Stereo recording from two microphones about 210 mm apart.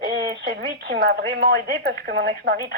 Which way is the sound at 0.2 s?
55° right (ahead or behind).